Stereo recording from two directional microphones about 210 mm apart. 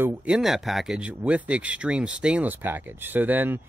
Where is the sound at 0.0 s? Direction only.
10° right (ahead or behind).